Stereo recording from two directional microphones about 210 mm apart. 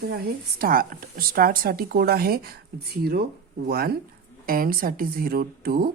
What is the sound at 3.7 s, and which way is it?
Speech, 45° right (ahead or behind).